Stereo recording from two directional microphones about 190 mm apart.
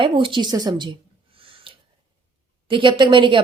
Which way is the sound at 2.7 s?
25° right (ahead or behind).